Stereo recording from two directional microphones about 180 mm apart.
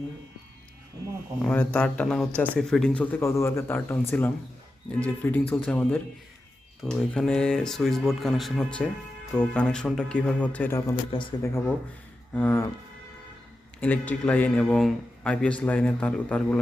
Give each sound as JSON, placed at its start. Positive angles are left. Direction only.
{"t": 1.5, "sound": "speech", "side_deg": 5}
{"t": 11.1, "sound": "speech", "side_deg": 30}
{"t": 12.3, "sound": "speech", "side_deg": 10}
{"t": 13.8, "sound": "speech", "side_deg": 10}